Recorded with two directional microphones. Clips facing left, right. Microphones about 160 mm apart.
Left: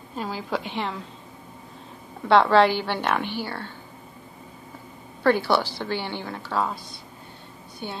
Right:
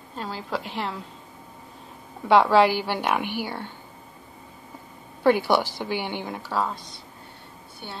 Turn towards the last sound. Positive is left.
turn(degrees=20)  # may be behind; listen again after turning